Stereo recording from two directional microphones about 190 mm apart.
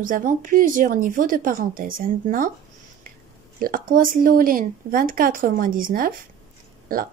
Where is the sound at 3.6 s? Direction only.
45° right (ahead or behind).